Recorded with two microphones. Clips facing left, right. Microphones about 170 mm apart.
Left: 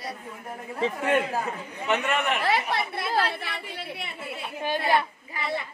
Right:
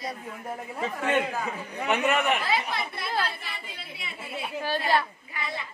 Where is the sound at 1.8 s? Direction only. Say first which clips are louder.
Right 1 dB; 5° right (ahead or behind).